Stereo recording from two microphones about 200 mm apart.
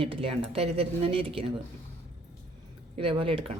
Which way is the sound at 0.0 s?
25° right (ahead or behind).